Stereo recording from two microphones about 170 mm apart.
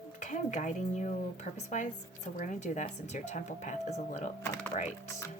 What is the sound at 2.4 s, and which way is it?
Speech, 45° left (ahead or behind).